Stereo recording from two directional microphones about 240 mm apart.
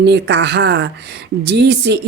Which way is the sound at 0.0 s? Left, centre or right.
Right.